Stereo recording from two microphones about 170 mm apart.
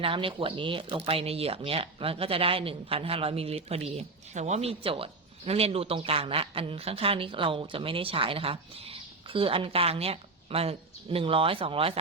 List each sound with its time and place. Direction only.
0.0 s speech: 30° right (ahead or behind)